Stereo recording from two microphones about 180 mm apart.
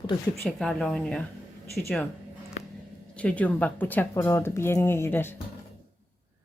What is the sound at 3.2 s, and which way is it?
Speech, 5° left (ahead or behind).